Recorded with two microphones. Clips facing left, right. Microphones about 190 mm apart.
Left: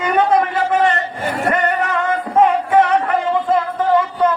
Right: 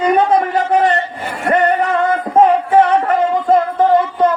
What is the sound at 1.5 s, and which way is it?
Music, 35° right (ahead or behind).